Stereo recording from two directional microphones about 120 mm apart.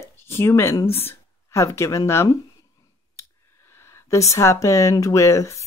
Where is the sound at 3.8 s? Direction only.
25° left (ahead or behind).